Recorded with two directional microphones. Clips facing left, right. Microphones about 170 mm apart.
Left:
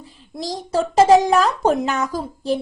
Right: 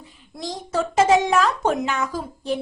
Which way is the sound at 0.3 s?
35° left (ahead or behind).